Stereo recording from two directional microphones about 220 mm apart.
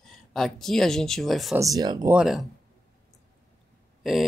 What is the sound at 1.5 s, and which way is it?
Speech, 15° right (ahead or behind).